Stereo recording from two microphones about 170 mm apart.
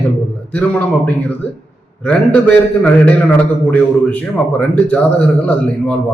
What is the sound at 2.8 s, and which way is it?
A man's voice, 5° left (ahead or behind).